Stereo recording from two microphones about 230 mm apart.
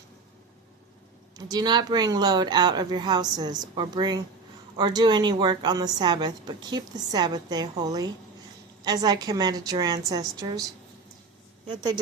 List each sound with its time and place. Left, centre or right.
1.5 s a woman's voice: centre